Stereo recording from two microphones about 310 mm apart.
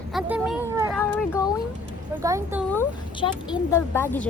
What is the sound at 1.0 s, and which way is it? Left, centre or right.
Speech, centre.